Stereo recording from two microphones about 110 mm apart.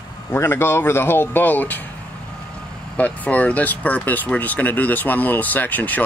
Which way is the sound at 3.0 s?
15° left (ahead or behind).